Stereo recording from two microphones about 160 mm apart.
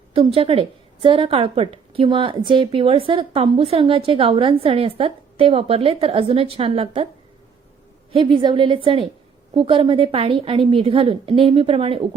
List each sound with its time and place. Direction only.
0.1 s a woman's voice: 35° right (ahead or behind)
8.1 s a woman's voice: 30° right (ahead or behind)